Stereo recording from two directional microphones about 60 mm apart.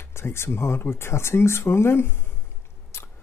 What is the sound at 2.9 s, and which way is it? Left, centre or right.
Biting, left.